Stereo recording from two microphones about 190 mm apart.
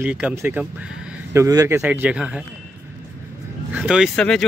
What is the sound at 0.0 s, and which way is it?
Speech, 10° right (ahead or behind).